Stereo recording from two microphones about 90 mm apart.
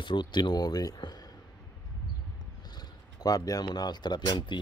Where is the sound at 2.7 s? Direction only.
50° left (ahead or behind).